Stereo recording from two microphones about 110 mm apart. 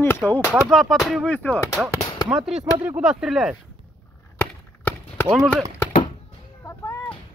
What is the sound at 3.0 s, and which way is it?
Speech, 5° right (ahead or behind).